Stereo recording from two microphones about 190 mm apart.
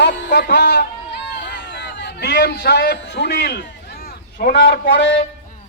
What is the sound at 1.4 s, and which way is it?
A man's voice, 65° left (ahead or behind).